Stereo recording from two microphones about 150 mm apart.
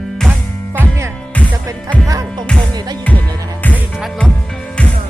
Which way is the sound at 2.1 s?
25° right (ahead or behind).